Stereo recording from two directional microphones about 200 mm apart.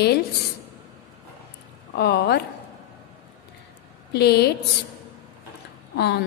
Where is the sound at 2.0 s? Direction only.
55° left (ahead or behind).